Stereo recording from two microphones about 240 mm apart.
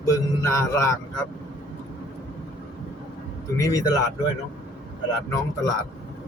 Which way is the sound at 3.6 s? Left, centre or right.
Centre.